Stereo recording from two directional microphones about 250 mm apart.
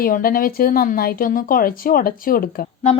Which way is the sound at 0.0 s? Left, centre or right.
Left.